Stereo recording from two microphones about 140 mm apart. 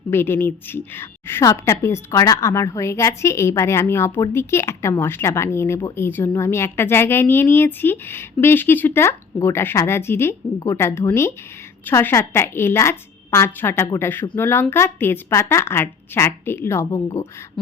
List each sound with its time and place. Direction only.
0.1 s a woman's voice: 15° left (ahead or behind)